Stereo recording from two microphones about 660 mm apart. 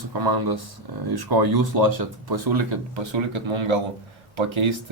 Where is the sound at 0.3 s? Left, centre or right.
Right.